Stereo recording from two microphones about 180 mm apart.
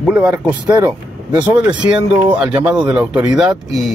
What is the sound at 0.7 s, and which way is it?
Speech, 20° right (ahead or behind).